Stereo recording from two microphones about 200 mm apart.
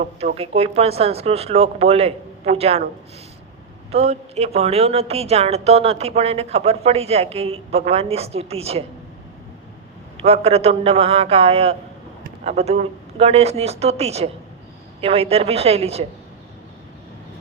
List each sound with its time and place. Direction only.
0.0 s a woman's voice: 35° right (ahead or behind)
3.9 s a woman's voice: 30° right (ahead or behind)
10.2 s a man's voice: 30° right (ahead or behind)